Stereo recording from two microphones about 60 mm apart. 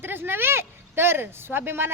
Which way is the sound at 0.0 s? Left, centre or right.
Right.